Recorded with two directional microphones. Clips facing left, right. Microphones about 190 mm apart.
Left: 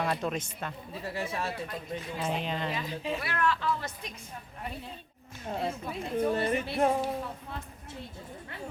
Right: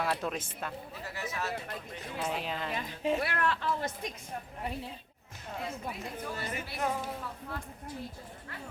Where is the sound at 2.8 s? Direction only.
50° right (ahead or behind).